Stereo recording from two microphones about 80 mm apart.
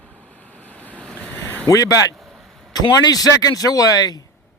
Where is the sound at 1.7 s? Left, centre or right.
Left.